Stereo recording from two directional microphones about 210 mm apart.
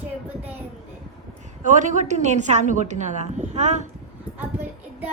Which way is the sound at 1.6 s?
35° right (ahead or behind).